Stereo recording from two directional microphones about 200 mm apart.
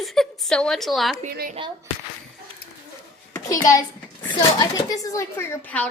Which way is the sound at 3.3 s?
15° left (ahead or behind).